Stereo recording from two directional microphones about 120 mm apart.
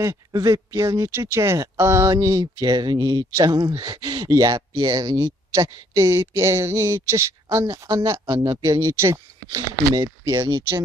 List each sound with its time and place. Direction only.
0.0 s speech: 25° right (ahead or behind)